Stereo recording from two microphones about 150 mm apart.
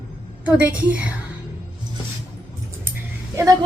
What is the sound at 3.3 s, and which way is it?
Speech, 20° right (ahead or behind).